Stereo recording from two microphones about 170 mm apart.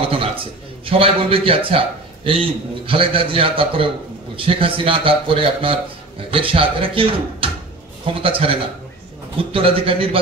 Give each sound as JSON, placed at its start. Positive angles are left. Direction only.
{"t": 0.8, "sound": "a man's voice", "side_deg": -35}